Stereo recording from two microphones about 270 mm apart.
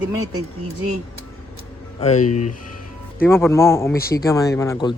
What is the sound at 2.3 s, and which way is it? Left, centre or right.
Speech, left.